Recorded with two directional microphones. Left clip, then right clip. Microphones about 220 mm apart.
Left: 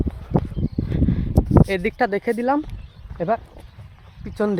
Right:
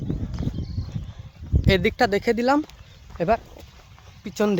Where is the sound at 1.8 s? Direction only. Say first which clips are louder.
Right 1 dB; 5° right (ahead or behind).